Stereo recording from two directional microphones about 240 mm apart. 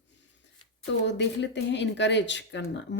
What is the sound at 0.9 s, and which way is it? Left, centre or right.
Speech, left.